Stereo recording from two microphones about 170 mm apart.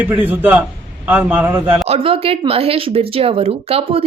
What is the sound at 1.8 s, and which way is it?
Speech, 35° right (ahead or behind).